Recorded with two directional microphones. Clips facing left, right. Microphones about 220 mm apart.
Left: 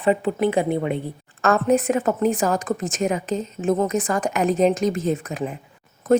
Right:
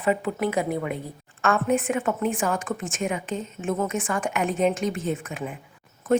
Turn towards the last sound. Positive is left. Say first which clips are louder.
# left 4 dB
turn(degrees=40)  # may be behind; listen again after turning